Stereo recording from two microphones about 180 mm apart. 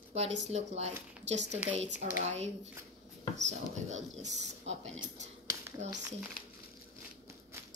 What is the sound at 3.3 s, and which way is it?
Speech, 40° right (ahead or behind).